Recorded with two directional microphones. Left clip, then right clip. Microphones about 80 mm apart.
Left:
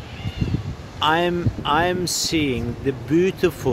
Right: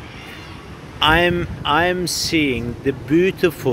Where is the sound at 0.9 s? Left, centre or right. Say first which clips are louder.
Right 4 dB; centre.